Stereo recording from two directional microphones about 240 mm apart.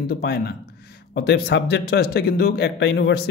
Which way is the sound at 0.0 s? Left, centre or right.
Left.